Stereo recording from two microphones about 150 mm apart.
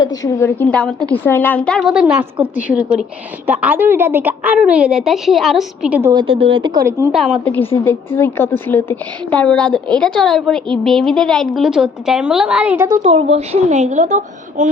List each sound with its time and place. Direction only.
0.0 s a woman's voice: 25° left (ahead or behind); by 1.9 s 5° left (ahead or behind)
1.9 s a woman's voice: 5° right (ahead or behind)
6.1 s speech: 35° right (ahead or behind)
7.1 s a woman's voice: centre (ahead or behind)
7.9 s a woman's voice: 15° left (ahead or behind); by 12.9 s 10° right (ahead or behind)
12.9 s a woman's voice: 40° right (ahead or behind); by 14.7 s 55° right (ahead or behind)